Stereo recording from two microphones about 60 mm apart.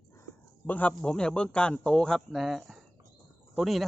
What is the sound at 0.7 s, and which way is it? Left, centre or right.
Speech, left.